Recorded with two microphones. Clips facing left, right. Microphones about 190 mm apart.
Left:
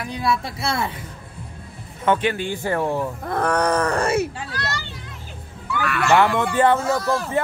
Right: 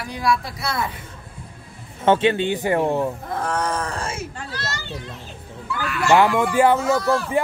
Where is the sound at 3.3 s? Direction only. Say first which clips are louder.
Left 7 dB; 70° left (ahead or behind).